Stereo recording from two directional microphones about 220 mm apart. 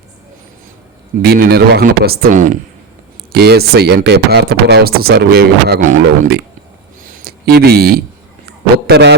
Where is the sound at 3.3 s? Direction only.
45° right (ahead or behind).